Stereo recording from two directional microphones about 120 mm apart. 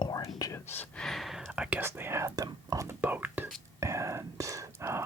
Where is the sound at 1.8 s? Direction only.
20° right (ahead or behind).